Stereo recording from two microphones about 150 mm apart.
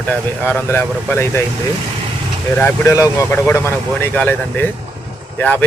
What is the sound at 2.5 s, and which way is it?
Speech, 15° left (ahead or behind).